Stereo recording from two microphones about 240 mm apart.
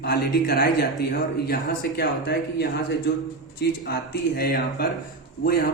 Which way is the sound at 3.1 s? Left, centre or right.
Left.